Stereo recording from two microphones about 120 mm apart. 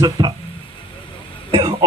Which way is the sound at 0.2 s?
30° right (ahead or behind).